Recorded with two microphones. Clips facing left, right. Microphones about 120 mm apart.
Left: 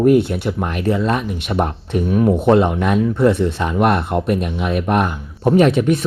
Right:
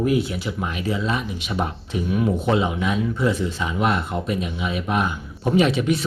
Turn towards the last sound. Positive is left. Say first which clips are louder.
# left 5 dB
turn(degrees=50)  # may be behind; listen again after turning